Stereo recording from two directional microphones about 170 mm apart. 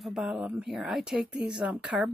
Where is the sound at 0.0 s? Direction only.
Centre (ahead or behind).